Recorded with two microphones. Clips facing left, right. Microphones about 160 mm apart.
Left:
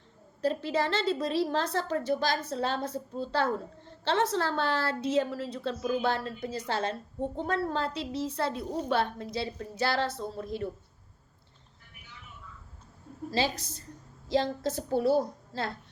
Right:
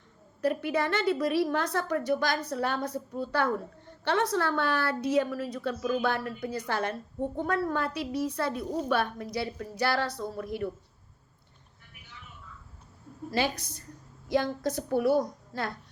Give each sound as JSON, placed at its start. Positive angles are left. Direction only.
{"t": 0.4, "sound": "a woman's voice", "side_deg": 25}
{"t": 13.3, "sound": "a woman's voice", "side_deg": 25}